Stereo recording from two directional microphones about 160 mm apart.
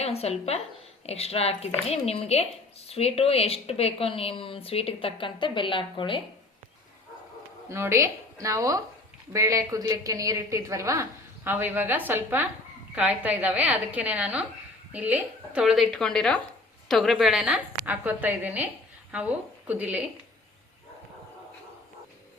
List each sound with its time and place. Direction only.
0.0 s a woman's voice: 40° left (ahead or behind)
7.7 s a woman's voice: 15° right (ahead or behind)